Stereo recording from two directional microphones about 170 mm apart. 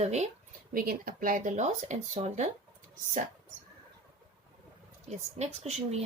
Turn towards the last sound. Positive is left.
turn(degrees=-40)  # may be behind; listen again after turning